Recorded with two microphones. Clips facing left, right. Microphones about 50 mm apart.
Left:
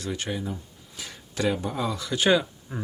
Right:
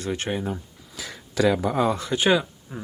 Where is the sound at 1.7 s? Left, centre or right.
Right.